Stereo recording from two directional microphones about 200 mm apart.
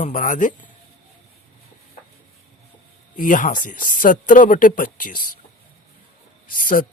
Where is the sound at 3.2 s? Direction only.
40° left (ahead or behind).